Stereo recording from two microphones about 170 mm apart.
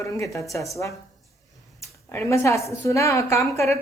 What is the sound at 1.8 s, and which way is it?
A woman's voice, 15° left (ahead or behind).